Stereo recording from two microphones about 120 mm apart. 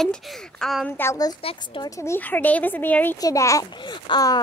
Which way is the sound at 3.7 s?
40° left (ahead or behind).